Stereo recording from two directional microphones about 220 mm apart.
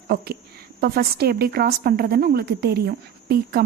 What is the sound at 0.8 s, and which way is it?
A woman's voice, 45° right (ahead or behind).